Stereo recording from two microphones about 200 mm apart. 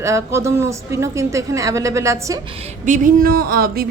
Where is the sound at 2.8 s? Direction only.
40° right (ahead or behind).